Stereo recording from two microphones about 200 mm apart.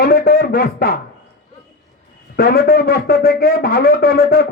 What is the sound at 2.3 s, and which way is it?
A man's voice, 50° left (ahead or behind).